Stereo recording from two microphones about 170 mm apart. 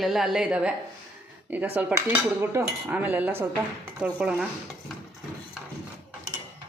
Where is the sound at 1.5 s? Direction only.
10° right (ahead or behind).